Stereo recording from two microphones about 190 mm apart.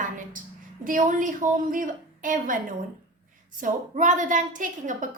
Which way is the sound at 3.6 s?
40° right (ahead or behind).